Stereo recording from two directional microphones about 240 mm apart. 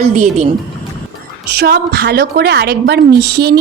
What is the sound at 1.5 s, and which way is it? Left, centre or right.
A woman's voice, right.